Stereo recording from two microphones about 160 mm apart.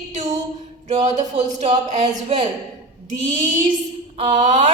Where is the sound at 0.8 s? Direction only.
45° right (ahead or behind).